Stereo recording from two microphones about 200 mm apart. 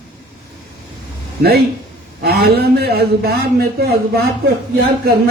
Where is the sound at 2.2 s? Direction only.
50° right (ahead or behind).